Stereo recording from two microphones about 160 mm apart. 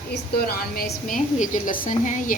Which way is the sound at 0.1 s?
80° left.